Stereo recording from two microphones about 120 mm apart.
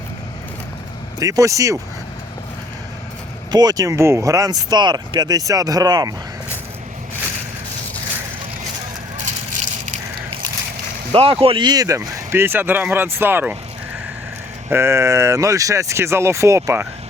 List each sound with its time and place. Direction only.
1.2 s speech: 30° right (ahead or behind)
3.5 s speech: 35° right (ahead or behind)
9.2 s vehicle: 85° right
11.1 s speech: 55° right (ahead or behind); by 13.6 s 15° right (ahead or behind)
14.7 s speech: 25° right (ahead or behind)